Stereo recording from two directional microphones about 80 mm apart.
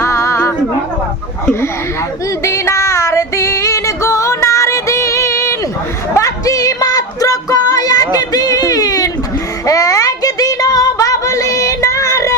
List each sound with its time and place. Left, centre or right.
0.0 s music: left
2.4 s female singing: left
6.1 s music: left
9.6 s a sound: left